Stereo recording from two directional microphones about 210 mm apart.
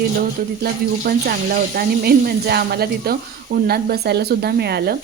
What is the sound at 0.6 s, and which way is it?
Speech, 45° right (ahead or behind).